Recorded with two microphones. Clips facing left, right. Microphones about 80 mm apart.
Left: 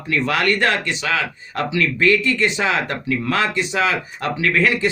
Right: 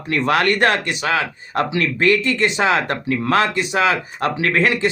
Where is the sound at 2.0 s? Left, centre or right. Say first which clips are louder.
Right 1 dB; right.